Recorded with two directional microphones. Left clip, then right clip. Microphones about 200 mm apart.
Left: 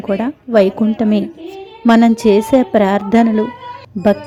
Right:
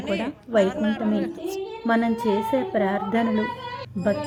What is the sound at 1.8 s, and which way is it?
A woman's voice, 35° left (ahead or behind).